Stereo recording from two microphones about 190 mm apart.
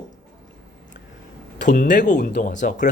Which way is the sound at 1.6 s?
40° left (ahead or behind).